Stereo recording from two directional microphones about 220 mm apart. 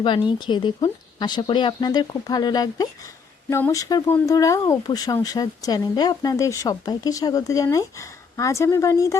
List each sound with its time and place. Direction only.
0.0 s speech: 20° left (ahead or behind)